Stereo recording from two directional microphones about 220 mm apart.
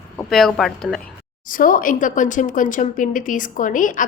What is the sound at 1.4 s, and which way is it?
Speech, 40° left (ahead or behind).